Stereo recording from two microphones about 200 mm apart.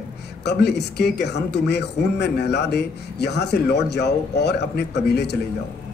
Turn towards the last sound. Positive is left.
turn(degrees=55)  # may be behind; listen again after turning